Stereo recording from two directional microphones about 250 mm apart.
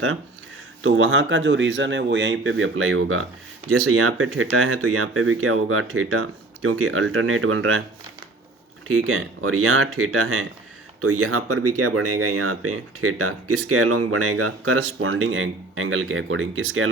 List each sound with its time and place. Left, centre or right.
0.8 s speech: right
8.9 s speech: right